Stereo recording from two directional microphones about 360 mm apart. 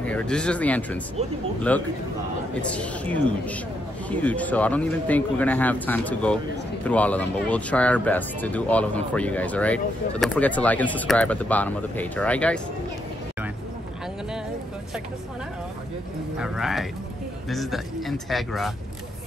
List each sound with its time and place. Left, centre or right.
0.0 s speech: centre
16.3 s speech: centre